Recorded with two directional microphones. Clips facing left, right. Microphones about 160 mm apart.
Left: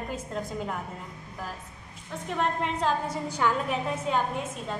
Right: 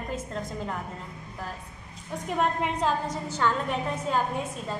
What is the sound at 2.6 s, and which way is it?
Speech, 5° right (ahead or behind).